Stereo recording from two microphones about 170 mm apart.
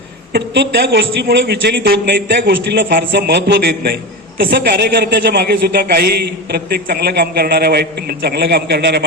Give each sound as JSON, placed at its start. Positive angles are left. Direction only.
{"t": 0.3, "sound": "a man's voice", "side_deg": -70}